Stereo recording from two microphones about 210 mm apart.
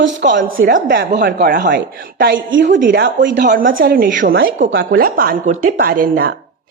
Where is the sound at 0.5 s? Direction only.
45° right (ahead or behind).